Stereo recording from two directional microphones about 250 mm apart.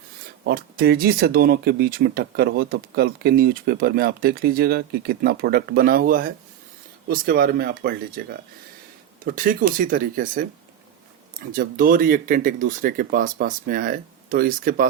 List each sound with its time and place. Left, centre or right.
0.4 s speech: right
11.5 s speech: right